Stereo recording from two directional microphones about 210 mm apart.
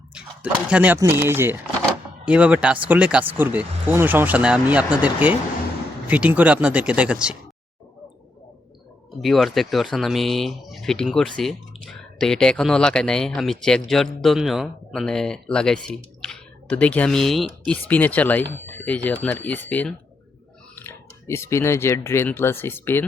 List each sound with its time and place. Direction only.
0.1 s speech: 5° right (ahead or behind)
9.2 s speech: centre (ahead or behind)